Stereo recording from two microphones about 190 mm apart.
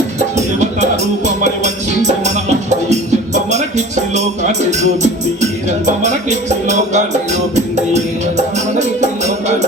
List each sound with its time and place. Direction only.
0.3 s music: 35° right (ahead or behind)
5.4 s music: 40° right (ahead or behind)
8.4 s music: 35° right (ahead or behind)